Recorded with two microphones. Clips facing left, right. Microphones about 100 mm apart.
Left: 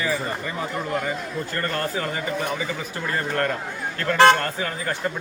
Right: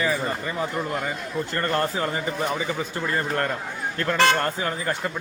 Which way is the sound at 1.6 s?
30° right (ahead or behind).